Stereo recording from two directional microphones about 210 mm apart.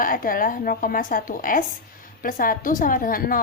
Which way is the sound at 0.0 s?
40° left (ahead or behind).